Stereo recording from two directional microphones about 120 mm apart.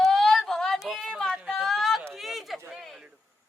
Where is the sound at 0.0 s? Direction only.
Centre (ahead or behind).